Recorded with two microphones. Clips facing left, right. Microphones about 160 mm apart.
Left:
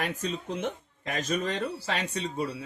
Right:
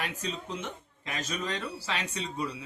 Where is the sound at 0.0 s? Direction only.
50° left (ahead or behind).